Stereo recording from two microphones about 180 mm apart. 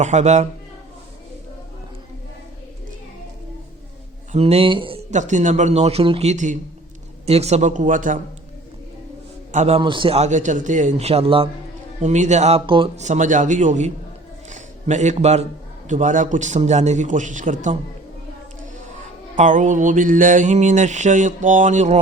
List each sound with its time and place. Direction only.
0.0 s a man's voice: 40° right (ahead or behind)
4.3 s a man's voice: 35° right (ahead or behind)
5.1 s a man's voice: 45° right (ahead or behind)
7.3 s mantra: 35° right (ahead or behind)
9.5 s a man's voice: 40° right (ahead or behind)
13.0 s mantra: 40° right (ahead or behind)
14.5 s a sound: 40° right (ahead or behind)
15.9 s mantra: 45° right (ahead or behind)
19.4 s mantra: 45° right (ahead or behind)